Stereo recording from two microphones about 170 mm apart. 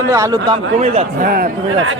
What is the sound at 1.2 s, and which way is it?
Speech, 55° right (ahead or behind).